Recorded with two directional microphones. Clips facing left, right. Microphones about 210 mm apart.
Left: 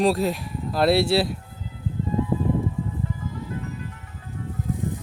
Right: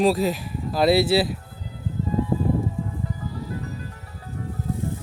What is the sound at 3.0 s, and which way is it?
Music, 35° right (ahead or behind).